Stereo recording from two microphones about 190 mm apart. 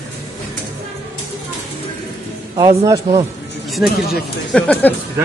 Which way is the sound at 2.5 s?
20° right (ahead or behind).